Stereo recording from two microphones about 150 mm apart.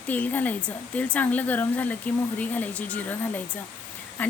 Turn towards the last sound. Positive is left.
turn(degrees=10)  # may be behind; listen again after turning